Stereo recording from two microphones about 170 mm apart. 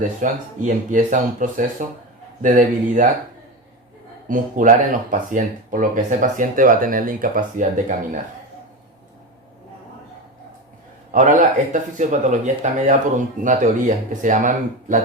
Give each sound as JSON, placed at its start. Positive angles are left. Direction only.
{"t": 0.2, "sound": "speech", "side_deg": -50}
{"t": 4.3, "sound": "speech", "side_deg": -50}
{"t": 11.1, "sound": "speech", "side_deg": -50}